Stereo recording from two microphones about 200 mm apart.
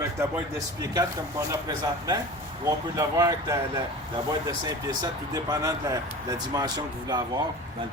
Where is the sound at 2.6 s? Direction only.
15° right (ahead or behind).